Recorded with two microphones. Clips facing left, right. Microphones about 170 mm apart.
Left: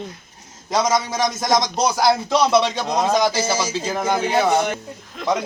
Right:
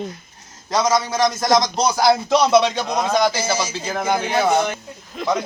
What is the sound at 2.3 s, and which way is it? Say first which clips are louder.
Speech: right 2 dB; 15° right (ahead or behind).